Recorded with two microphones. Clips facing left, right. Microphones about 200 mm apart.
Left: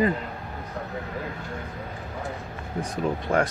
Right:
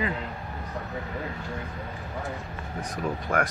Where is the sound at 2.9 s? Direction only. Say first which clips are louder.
Left 3 dB; 25° left (ahead or behind).